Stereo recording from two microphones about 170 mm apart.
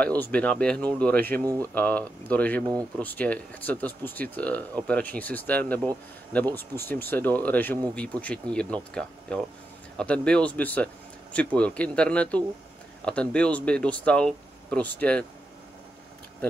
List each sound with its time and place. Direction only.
0.2 s speech: 10° left (ahead or behind)
1.4 s speech: 20° right (ahead or behind)
1.7 s speech: 10° left (ahead or behind)
2.6 s speech: 20° right (ahead or behind)
3.0 s speech: 10° left (ahead or behind)